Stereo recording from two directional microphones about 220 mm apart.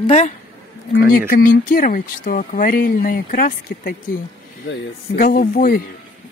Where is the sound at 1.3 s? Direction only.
40° left (ahead or behind).